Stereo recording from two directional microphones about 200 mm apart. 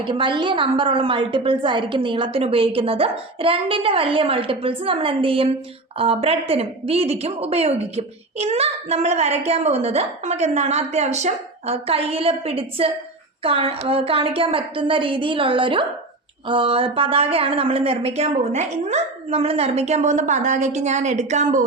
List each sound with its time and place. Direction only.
0.0 s a woman's voice: 25° right (ahead or behind)